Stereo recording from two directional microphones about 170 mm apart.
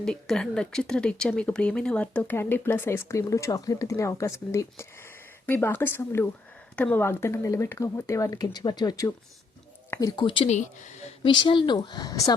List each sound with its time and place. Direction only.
0.0 s a woman's voice: 5° left (ahead or behind); by 10.5 s 30° left (ahead or behind)
10.5 s speech: 45° left (ahead or behind)
11.2 s a woman's voice: 30° left (ahead or behind)